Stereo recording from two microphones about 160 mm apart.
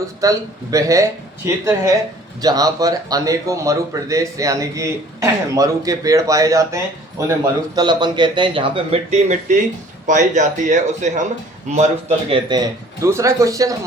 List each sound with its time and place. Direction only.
0.2 s speech: 20° right (ahead or behind); by 12.4 s 40° right (ahead or behind)
12.5 s speech: 20° right (ahead or behind)